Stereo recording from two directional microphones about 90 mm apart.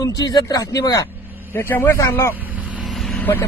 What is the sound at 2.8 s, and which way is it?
Vehicle, centre (ahead or behind).